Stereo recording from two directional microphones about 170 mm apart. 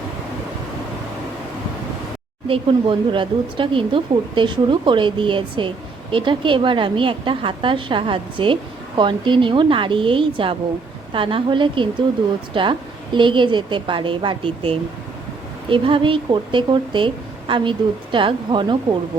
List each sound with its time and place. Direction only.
2.5 s speech: 30° right (ahead or behind)